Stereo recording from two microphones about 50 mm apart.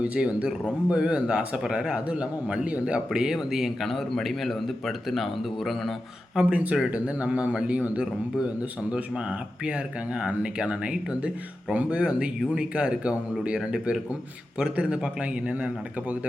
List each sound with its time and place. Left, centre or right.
0.0 s a man's voice: right
3.3 s speech: centre
6.4 s a man's voice: right
9.6 s a man's voice: right